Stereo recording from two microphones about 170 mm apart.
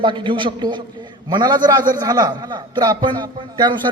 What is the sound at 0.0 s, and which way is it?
A man's voice, 30° right (ahead or behind).